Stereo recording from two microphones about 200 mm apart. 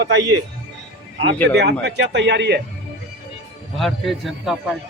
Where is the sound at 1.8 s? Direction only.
60° right (ahead or behind).